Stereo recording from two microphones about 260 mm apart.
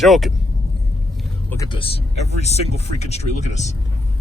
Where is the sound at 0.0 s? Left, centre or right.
Centre.